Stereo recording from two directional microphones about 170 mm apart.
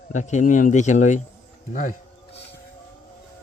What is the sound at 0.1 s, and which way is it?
Speech, 45° left (ahead or behind).